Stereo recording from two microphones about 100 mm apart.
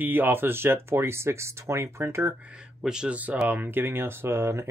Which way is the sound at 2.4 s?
10° right (ahead or behind).